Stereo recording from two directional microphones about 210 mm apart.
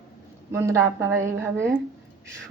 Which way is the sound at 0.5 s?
15° right (ahead or behind).